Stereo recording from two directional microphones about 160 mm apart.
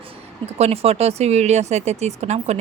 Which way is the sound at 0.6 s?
40° right (ahead or behind).